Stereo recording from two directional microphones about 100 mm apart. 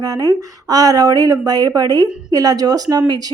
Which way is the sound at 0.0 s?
40° right (ahead or behind).